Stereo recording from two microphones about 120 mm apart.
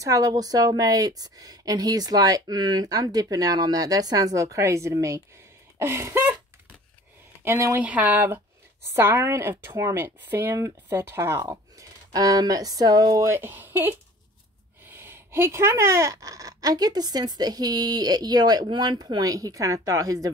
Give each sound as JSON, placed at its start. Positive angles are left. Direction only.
{"t": 0.0, "sound": "speech", "side_deg": -30}
{"t": 5.8, "sound": "a sound", "side_deg": -20}
{"t": 7.4, "sound": "speech", "side_deg": -20}